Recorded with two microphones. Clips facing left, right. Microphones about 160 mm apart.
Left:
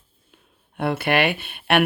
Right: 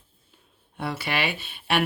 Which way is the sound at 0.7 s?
55° left (ahead or behind).